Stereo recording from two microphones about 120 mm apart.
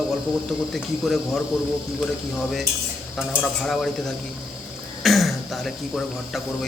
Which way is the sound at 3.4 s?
5° left (ahead or behind).